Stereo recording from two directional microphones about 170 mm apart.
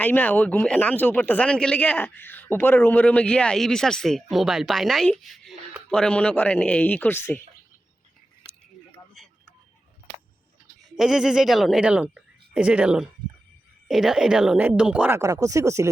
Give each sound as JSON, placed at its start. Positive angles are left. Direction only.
{"t": 0.0, "sound": "speech", "side_deg": 10}
{"t": 10.9, "sound": "a woman's voice", "side_deg": -5}
{"t": 15.2, "sound": "speech", "side_deg": -20}